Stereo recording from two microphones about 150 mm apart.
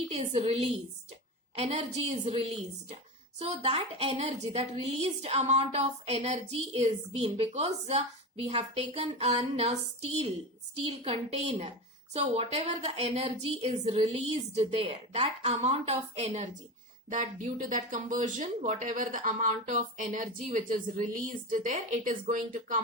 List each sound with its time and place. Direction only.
0.1 s a woman's voice: 45° right (ahead or behind)
10.8 s a woman's voice: 40° right (ahead or behind)
17.1 s speech: 55° right (ahead or behind)